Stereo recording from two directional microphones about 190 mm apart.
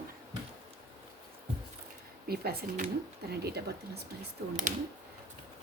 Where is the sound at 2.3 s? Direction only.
55° right (ahead or behind).